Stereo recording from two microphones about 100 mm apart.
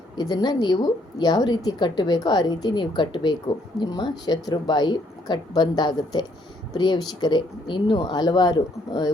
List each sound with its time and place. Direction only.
0.2 s a woman's voice: 45° left (ahead or behind)